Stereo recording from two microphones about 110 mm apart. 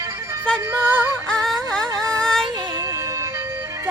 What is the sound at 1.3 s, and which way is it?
Music, 5° left (ahead or behind).